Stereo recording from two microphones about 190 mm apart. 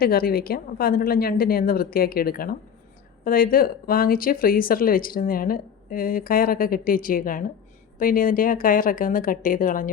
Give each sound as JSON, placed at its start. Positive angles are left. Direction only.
{"t": 0.0, "sound": "speech", "side_deg": 50}